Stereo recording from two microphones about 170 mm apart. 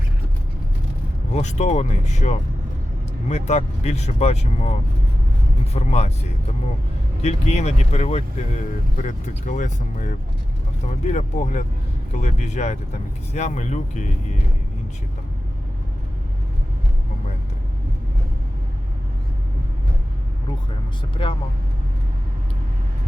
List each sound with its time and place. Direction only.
1.3 s speech: 40° left (ahead or behind)
5.7 s speech: 40° left (ahead or behind)
7.2 s speech: 40° left (ahead or behind)
21.2 s speech: 30° left (ahead or behind)